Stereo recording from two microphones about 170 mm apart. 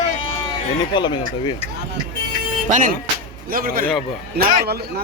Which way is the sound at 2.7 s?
50° right (ahead or behind).